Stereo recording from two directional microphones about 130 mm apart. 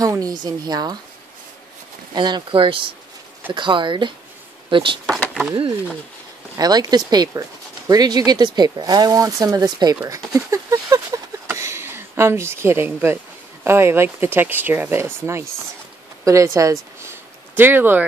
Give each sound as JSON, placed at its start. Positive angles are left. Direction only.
{"t": 0.0, "sound": "speech", "side_deg": -25}
{"t": 2.1, "sound": "speech", "side_deg": -35}
{"t": 6.5, "sound": "speech", "side_deg": -30}
{"t": 17.1, "sound": "a sound", "side_deg": -15}